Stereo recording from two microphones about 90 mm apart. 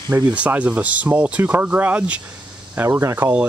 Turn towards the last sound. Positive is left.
turn(degrees=-25)  # may be behind; listen again after turning